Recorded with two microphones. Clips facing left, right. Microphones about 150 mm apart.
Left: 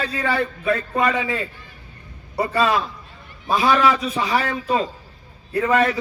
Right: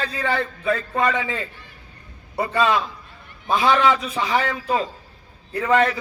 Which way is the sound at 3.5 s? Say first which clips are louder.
Even; 25° right (ahead or behind).